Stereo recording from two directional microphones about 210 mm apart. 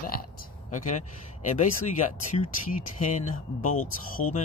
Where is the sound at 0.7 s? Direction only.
35° left (ahead or behind).